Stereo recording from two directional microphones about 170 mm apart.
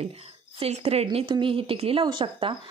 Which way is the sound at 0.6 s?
35° right (ahead or behind).